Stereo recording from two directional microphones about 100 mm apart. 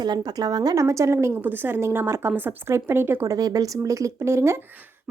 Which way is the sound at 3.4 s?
40° right (ahead or behind).